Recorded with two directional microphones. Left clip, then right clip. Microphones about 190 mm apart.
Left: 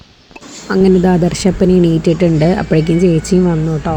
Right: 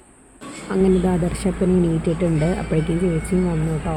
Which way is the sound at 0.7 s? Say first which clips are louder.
Left 8 dB; 15° left (ahead or behind).